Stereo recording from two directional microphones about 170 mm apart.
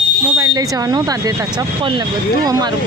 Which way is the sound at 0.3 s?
20° right (ahead or behind).